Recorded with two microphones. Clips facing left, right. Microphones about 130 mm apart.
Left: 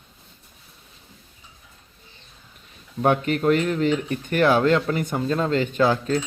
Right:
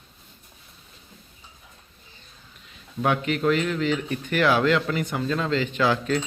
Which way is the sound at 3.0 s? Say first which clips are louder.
Left 3 dB; 45° left (ahead or behind).